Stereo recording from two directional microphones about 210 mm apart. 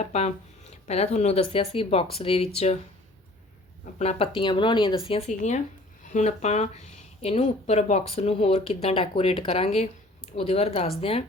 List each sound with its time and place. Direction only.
0.0 s speech: 30° left (ahead or behind)
3.9 s speech: 30° left (ahead or behind)